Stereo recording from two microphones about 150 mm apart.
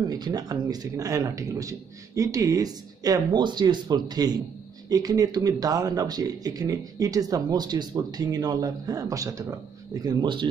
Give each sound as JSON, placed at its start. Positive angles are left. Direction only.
{"t": 0.1, "sound": "speech", "side_deg": -25}